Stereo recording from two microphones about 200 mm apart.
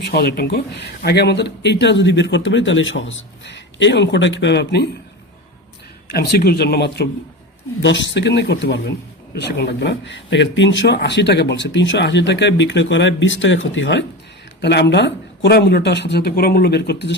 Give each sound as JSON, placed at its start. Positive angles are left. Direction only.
{"t": 0.0, "sound": "speech", "side_deg": 55}
{"t": 6.1, "sound": "speech", "side_deg": 50}
{"t": 14.6, "sound": "speech", "side_deg": 55}